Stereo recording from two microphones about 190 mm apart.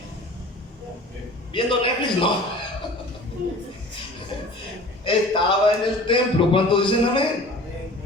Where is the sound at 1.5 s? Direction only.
25° left (ahead or behind).